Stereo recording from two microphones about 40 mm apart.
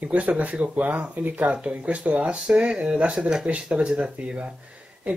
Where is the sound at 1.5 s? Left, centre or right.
Right.